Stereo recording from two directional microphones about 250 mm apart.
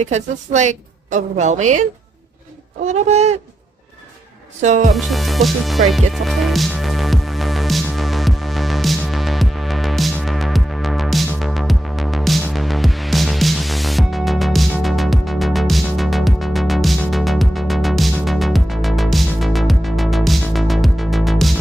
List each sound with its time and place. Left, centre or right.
0.0 s a woman's voice: right
4.6 s a woman's voice: right
4.9 s music: centre